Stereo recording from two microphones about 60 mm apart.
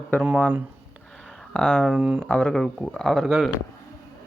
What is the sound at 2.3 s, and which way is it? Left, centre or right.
Speech, left.